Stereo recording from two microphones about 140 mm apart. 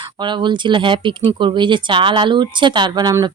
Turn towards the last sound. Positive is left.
turn(degrees=-30)  # may be behind; listen again after turning